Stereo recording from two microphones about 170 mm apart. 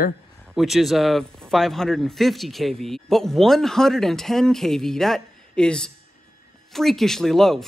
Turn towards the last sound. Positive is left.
turn(degrees=0)  # may be behind; listen again after turning